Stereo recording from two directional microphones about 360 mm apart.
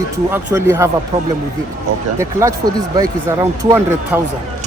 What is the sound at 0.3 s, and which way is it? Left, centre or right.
Speech, centre.